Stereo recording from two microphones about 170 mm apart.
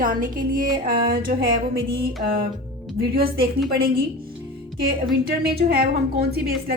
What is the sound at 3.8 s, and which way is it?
Speech, 60° right (ahead or behind).